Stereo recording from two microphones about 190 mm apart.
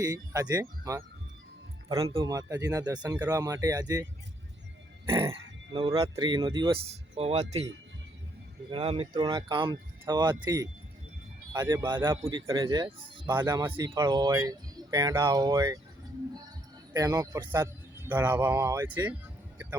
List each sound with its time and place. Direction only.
0.0 s speech: 20° right (ahead or behind)
2.1 s speech: 20° right (ahead or behind)
5.3 s speech: 30° right (ahead or behind)
8.7 s speech: 30° right (ahead or behind)
16.9 s speech: 15° right (ahead or behind)